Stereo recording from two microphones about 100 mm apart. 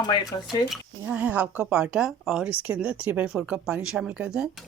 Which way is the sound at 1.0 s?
15° right (ahead or behind).